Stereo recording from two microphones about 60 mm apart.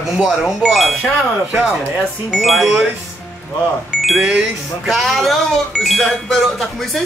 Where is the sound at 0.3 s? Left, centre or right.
Centre.